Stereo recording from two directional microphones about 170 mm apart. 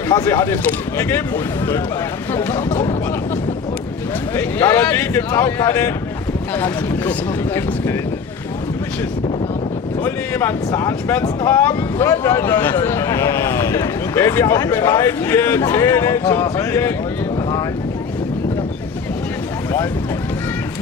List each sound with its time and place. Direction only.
0.1 s speech: 20° left (ahead or behind)
2.3 s speech: 20° left (ahead or behind)
4.4 s speech: 15° left (ahead or behind)
10.0 s speech: 15° left (ahead or behind)